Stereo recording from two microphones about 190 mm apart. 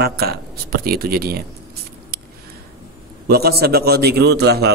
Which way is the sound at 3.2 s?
55° right (ahead or behind).